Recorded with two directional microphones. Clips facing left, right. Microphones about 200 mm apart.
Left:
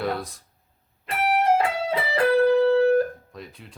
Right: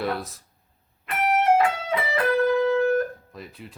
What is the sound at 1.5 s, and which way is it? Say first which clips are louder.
Music: right 1 dB; 30° left (ahead or behind).